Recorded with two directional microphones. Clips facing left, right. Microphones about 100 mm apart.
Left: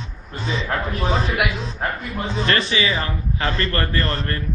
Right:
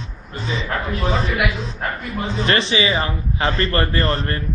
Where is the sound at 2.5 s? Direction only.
20° right (ahead or behind).